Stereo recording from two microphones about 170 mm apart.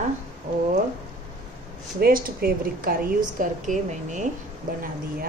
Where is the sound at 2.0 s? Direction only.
60° right (ahead or behind).